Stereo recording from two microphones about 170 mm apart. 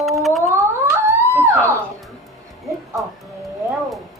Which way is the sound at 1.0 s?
15° right (ahead or behind).